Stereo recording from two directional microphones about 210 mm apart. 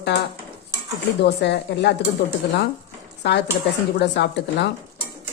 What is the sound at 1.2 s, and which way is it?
Speech, 55° left (ahead or behind).